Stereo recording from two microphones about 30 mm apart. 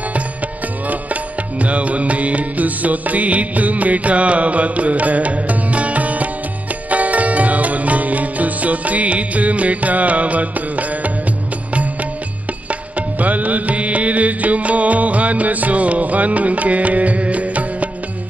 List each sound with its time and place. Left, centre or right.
1.6 s music: right
13.2 s music: right